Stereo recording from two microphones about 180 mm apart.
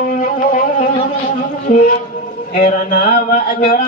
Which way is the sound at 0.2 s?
45° left (ahead or behind).